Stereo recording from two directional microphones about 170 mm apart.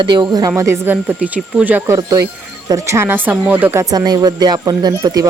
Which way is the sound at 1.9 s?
20° right (ahead or behind).